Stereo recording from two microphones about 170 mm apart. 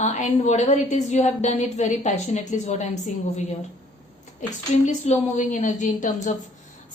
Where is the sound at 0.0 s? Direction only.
45° left (ahead or behind).